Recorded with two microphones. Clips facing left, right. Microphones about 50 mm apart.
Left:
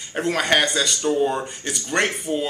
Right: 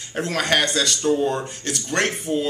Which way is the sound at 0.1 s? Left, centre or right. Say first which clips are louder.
Left 1 dB; centre.